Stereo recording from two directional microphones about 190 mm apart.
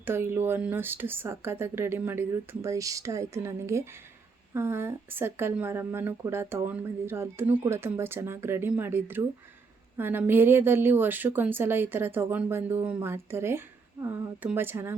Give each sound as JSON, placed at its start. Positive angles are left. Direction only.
{"t": 0.0, "sound": "a woman's voice", "side_deg": -10}